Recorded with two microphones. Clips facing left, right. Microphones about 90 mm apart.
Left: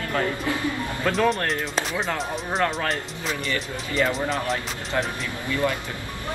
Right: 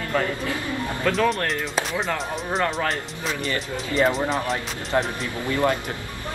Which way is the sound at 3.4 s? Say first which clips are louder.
Right 1 dB; 35° right (ahead or behind).